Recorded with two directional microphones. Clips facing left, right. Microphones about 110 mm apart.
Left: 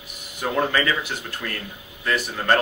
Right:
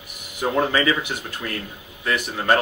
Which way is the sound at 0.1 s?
15° right (ahead or behind).